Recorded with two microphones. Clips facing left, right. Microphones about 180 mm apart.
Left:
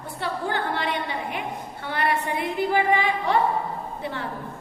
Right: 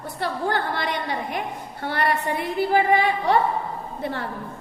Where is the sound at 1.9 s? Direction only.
40° right (ahead or behind).